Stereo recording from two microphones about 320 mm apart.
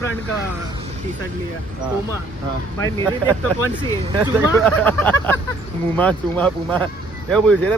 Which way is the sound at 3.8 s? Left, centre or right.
Centre.